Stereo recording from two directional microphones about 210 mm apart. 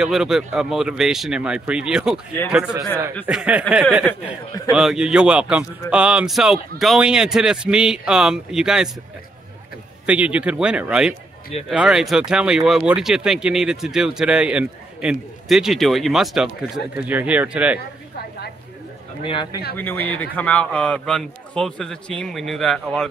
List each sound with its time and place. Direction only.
0.0 s speech: centre (ahead or behind)
3.3 s speech: 5° right (ahead or behind)
10.0 s speech: 5° right (ahead or behind)
19.2 s speech: 25° left (ahead or behind)
19.8 s speech: 10° left (ahead or behind)